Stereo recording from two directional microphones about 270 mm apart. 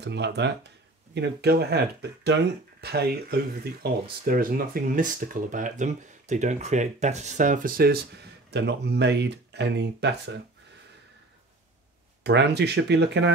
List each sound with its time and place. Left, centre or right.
0.0 s speech: right
12.2 s speech: right